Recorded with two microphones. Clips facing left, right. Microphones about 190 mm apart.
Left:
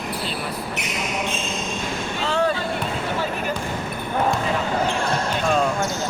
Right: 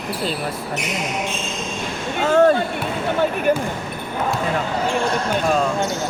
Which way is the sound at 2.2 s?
50° right (ahead or behind).